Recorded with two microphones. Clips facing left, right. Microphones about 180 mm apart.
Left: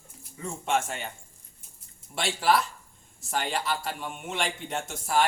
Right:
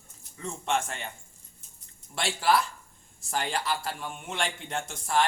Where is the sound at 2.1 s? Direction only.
Centre (ahead or behind).